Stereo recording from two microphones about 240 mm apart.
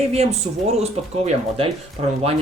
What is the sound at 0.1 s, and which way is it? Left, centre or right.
Speech, right.